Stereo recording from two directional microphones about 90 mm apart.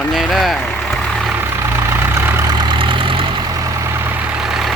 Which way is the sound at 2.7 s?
70° right (ahead or behind).